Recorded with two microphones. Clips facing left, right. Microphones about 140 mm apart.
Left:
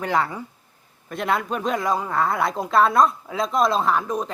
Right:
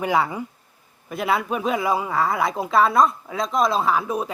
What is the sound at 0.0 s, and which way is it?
Speech, 10° right (ahead or behind).